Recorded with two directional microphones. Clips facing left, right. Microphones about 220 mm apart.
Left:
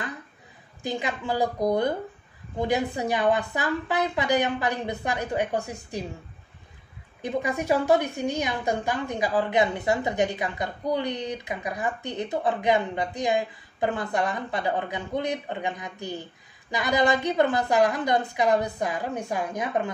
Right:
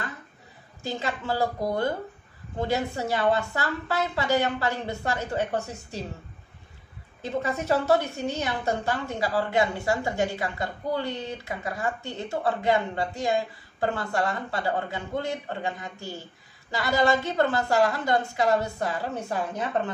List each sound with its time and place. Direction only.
0.8 s a woman's voice: 15° left (ahead or behind)
7.2 s a woman's voice: 15° left (ahead or behind)